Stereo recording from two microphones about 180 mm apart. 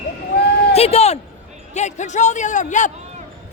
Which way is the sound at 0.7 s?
35° left (ahead or behind).